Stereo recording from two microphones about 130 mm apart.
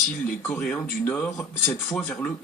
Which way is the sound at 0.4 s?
15° left (ahead or behind).